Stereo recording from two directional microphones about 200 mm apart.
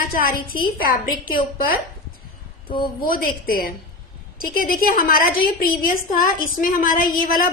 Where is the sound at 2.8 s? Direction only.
45° left (ahead or behind).